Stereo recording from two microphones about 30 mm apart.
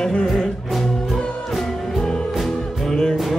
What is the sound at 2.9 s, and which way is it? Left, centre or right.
Music, centre.